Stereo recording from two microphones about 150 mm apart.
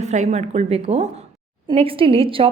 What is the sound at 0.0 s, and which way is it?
A woman's voice, 50° right (ahead or behind).